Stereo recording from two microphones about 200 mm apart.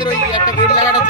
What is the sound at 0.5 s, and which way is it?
Speech, 35° left (ahead or behind).